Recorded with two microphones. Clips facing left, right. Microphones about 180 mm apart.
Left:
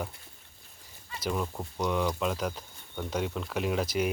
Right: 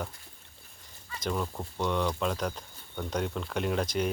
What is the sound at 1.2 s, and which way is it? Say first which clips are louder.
Speech: even; 5° left (ahead or behind).